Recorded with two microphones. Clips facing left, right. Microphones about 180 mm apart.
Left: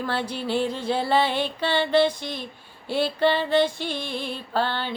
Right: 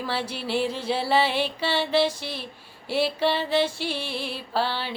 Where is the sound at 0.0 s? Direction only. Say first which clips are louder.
Left 2 dB; 5° right (ahead or behind).